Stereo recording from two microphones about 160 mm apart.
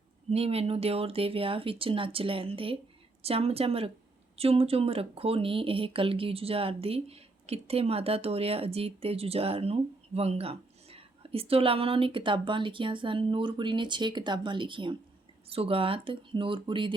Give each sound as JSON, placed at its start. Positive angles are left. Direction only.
{"t": 0.3, "sound": "speech", "side_deg": -40}